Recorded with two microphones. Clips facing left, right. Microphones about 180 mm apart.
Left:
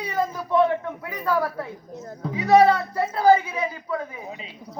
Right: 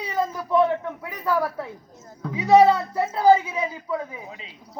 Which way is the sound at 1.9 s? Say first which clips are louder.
Left 9 dB; 65° left (ahead or behind).